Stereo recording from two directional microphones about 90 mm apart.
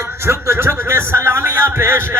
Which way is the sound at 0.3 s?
30° right (ahead or behind).